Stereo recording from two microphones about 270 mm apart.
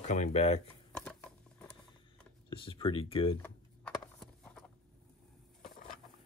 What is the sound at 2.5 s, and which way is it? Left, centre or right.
Speech, centre.